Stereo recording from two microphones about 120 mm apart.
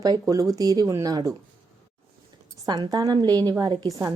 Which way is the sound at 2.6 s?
35° right (ahead or behind).